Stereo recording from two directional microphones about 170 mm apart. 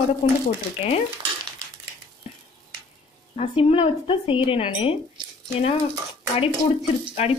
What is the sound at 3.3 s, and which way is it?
Speech, 35° left (ahead or behind).